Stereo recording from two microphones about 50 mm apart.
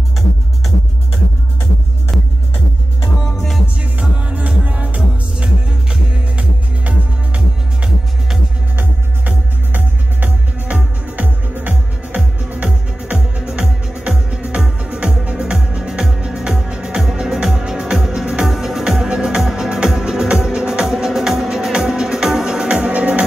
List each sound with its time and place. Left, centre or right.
4.0 s music: right
13.5 s music: centre